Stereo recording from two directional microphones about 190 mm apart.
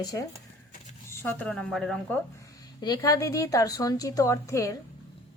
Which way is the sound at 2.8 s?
20° left (ahead or behind).